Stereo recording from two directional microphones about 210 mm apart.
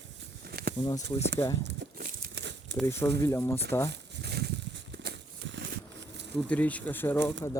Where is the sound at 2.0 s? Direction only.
45° right (ahead or behind).